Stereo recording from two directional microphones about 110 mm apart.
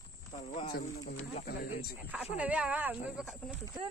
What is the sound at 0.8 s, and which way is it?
Speech, 90° left.